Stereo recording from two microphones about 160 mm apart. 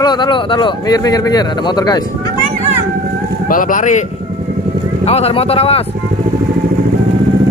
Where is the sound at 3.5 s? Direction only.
60° left (ahead or behind).